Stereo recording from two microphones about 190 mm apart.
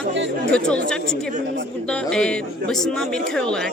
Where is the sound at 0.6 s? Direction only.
5° left (ahead or behind).